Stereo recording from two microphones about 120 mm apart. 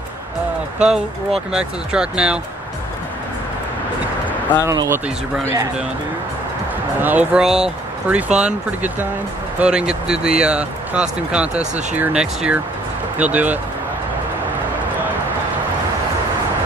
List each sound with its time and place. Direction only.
0.7 s speech: 5° right (ahead or behind)
4.6 s speech: 25° right (ahead or behind)
7.0 s speech: 15° right (ahead or behind)